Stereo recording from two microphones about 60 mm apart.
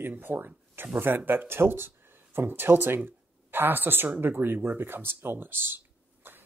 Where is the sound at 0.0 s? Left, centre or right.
Right.